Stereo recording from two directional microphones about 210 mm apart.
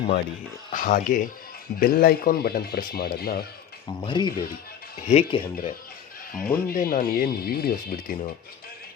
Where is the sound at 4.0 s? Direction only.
20° left (ahead or behind).